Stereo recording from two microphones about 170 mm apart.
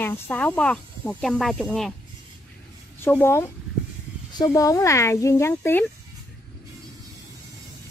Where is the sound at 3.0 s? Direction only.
15° left (ahead or behind).